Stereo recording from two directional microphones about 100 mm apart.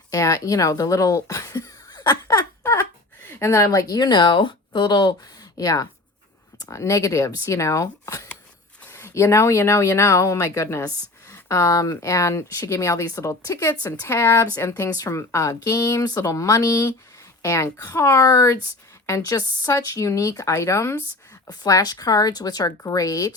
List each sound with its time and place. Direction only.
0.1 s speech: 35° left (ahead or behind)
2.4 s a sound: 25° left (ahead or behind)
3.2 s speech: 25° left (ahead or behind)
21.5 s speech: 40° left (ahead or behind)